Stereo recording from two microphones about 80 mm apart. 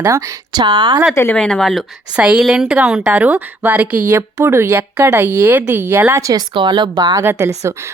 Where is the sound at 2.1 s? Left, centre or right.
Centre; by 6.4 s right.